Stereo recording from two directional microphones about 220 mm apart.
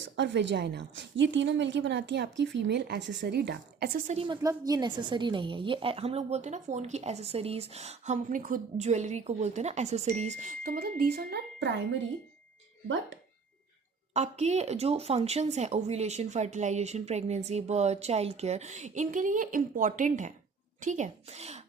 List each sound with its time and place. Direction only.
0.0 s a woman's voice: 55° right (ahead or behind)
14.1 s a woman's voice: 30° right (ahead or behind)